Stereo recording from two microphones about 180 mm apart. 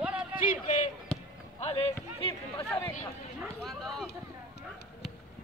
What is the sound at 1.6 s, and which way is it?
Run, 35° left (ahead or behind).